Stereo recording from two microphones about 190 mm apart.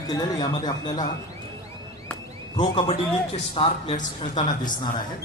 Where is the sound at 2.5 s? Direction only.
30° left (ahead or behind).